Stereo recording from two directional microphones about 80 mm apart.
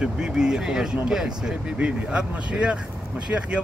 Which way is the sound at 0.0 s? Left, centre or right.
Centre.